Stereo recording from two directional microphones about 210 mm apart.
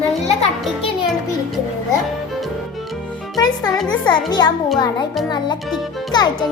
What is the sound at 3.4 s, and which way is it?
Speech, 20° left (ahead or behind).